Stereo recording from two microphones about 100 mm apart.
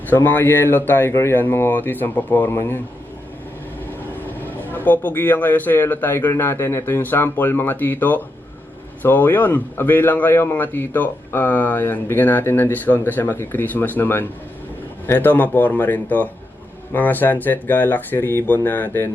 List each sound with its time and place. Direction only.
0.1 s a man's voice: 20° left (ahead or behind)
4.2 s a man's voice: 20° left (ahead or behind)